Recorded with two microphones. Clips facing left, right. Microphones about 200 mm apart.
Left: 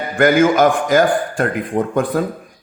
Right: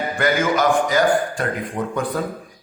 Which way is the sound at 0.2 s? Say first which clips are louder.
Left 8 dB; 50° left (ahead or behind).